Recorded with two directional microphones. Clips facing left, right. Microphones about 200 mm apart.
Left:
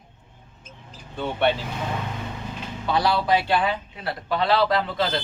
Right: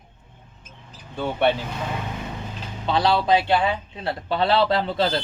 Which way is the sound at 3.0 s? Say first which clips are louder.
Right 3 dB; 25° right (ahead or behind).